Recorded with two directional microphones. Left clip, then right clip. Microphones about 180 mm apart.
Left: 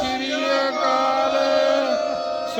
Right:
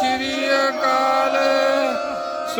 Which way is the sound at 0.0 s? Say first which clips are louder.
Right 2 dB; 10° right (ahead or behind).